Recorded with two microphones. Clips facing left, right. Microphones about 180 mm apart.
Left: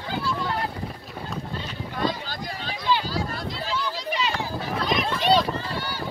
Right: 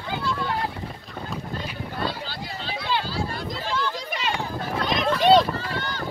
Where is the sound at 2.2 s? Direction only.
45° left (ahead or behind).